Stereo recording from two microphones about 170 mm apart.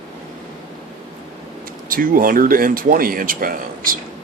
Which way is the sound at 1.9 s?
55° right (ahead or behind).